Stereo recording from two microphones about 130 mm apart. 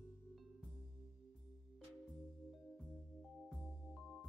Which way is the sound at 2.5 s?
Centre (ahead or behind).